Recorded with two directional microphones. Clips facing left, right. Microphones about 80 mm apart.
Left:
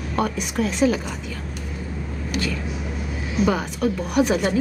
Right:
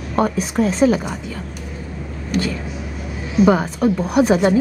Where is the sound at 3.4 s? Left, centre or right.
Right.